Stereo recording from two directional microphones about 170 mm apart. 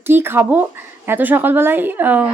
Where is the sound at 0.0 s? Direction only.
15° right (ahead or behind).